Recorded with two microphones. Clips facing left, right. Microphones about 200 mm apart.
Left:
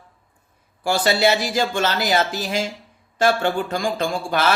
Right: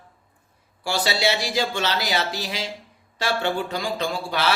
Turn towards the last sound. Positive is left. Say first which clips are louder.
# left 4 dB
turn(degrees=50)  # may be behind; listen again after turning